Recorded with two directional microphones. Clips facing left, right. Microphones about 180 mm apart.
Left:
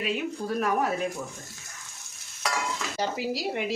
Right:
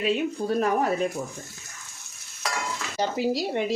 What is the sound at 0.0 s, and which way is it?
Speech, 30° right (ahead or behind).